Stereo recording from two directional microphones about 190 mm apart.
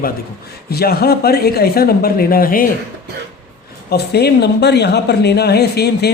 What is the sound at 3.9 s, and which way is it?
A man's voice, 60° left (ahead or behind).